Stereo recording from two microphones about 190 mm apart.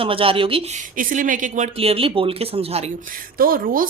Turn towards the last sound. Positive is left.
turn(degrees=-50)  # may be behind; listen again after turning